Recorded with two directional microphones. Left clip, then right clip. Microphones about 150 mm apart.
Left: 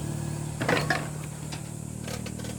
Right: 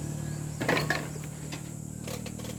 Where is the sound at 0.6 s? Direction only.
20° right (ahead or behind).